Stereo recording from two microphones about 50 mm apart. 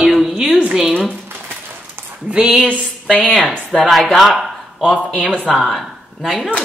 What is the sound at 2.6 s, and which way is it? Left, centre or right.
Speech, left.